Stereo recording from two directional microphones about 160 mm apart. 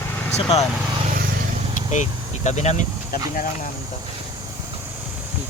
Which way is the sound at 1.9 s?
45° left (ahead or behind).